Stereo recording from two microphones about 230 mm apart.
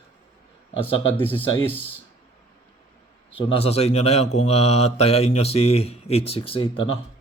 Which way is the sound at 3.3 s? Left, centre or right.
Left.